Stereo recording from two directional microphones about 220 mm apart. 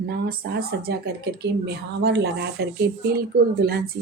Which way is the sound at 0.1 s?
45° right (ahead or behind).